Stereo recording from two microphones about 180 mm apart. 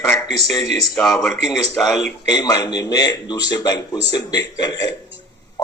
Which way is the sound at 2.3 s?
20° left (ahead or behind).